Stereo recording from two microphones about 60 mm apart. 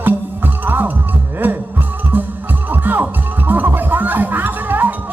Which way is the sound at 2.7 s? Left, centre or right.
Right.